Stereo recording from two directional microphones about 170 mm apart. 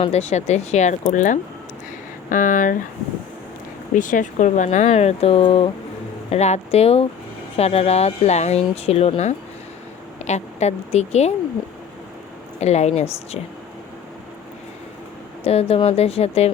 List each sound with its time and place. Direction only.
0.0 s speech: 40° left (ahead or behind)
3.9 s speech: 50° left (ahead or behind)
12.5 s speech: 40° left (ahead or behind)
15.4 s speech: 35° left (ahead or behind)